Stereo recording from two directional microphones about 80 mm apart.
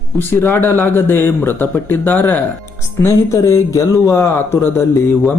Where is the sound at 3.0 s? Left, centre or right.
Left.